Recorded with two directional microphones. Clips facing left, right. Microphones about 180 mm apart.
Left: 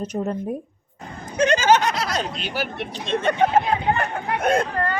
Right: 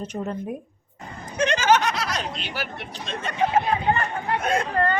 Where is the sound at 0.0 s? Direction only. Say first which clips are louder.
Left 4 dB; 40° left (ahead or behind).